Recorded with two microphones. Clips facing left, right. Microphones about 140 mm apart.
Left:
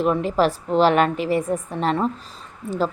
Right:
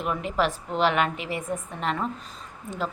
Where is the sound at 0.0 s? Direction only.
35° left (ahead or behind).